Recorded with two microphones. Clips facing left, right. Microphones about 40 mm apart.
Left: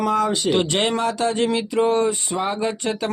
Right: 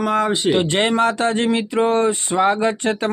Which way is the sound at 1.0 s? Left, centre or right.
Right.